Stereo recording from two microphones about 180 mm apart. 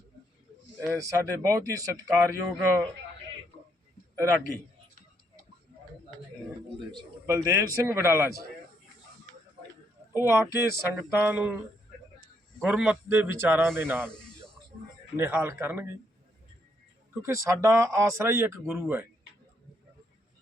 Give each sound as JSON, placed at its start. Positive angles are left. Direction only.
{"t": 0.8, "sound": "speech", "side_deg": -15}
{"t": 6.9, "sound": "speech", "side_deg": -15}
{"t": 10.2, "sound": "speech", "side_deg": -15}
{"t": 12.6, "sound": "speech", "side_deg": -5}
{"t": 15.1, "sound": "speech", "side_deg": -10}
{"t": 17.2, "sound": "speech", "side_deg": -15}